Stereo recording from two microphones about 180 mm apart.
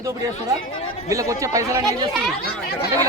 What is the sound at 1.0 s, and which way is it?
Speech, 20° right (ahead or behind).